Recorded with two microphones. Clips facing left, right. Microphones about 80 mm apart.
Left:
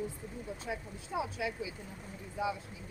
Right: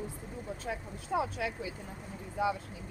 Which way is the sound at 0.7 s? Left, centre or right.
Right.